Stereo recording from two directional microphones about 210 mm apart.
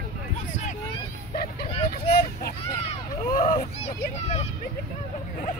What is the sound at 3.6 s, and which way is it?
Vehicle, 30° left (ahead or behind).